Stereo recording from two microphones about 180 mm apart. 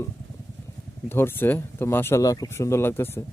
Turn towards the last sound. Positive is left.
turn(degrees=15)  # may be behind; listen again after turning